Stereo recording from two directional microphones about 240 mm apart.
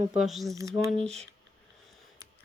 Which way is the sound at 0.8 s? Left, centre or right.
Centre.